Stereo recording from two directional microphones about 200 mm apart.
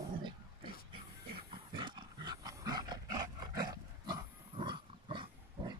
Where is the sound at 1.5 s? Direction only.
20° right (ahead or behind).